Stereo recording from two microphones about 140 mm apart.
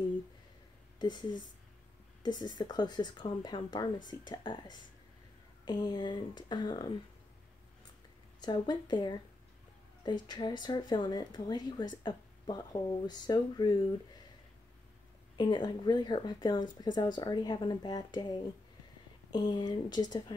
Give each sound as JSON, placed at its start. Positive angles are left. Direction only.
{"t": 0.9, "sound": "speech", "side_deg": 30}
{"t": 8.4, "sound": "speech", "side_deg": 30}
{"t": 15.3, "sound": "speech", "side_deg": 30}
{"t": 19.3, "sound": "speech", "side_deg": 30}